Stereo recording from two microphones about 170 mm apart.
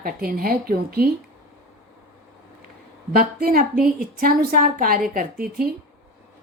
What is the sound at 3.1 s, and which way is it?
A woman's voice, 60° right (ahead or behind).